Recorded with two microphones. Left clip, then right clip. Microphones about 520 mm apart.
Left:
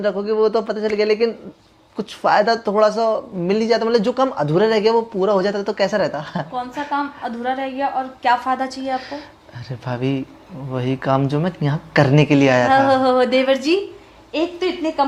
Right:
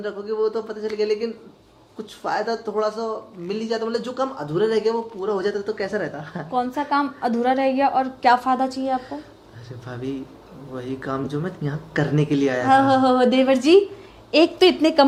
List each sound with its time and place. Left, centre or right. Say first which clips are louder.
0.0 s speech: left 6 dB; left
6.9 s a woman's voice: right 2 dB; centre
9.8 s speech: left 8 dB; left
12.7 s speech: left 2 dB; centre
14.3 s a woman's voice: right 6 dB; right